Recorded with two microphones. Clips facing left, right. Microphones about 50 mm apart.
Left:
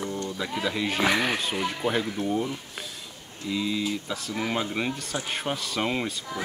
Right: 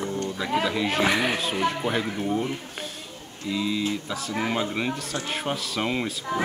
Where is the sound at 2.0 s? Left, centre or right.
Right.